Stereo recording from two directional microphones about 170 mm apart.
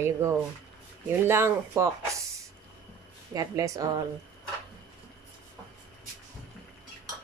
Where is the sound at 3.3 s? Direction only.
20° right (ahead or behind).